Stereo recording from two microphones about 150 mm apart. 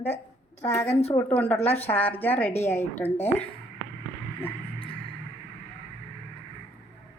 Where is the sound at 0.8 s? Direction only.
45° left (ahead or behind).